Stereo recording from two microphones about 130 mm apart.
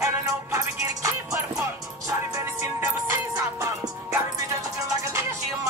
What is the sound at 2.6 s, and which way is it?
Music, 20° right (ahead or behind).